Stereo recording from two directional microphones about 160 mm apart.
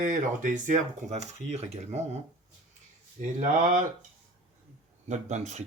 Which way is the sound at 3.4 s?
60° right (ahead or behind).